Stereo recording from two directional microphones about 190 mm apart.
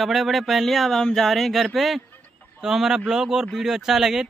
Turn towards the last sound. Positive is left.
turn(degrees=0)  # may be behind; listen again after turning